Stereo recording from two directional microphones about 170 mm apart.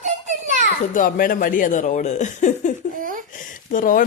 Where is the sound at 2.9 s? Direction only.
55° right (ahead or behind).